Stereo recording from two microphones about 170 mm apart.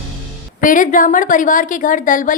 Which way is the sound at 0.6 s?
50° left (ahead or behind).